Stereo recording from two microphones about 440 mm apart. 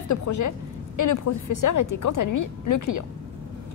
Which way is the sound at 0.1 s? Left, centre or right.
Left.